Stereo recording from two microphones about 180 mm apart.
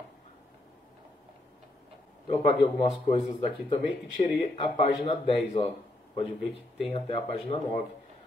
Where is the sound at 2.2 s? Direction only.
35° left (ahead or behind).